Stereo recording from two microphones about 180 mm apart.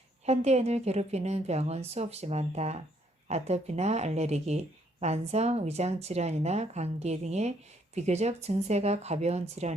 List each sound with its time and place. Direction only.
0.3 s speech: 35° right (ahead or behind)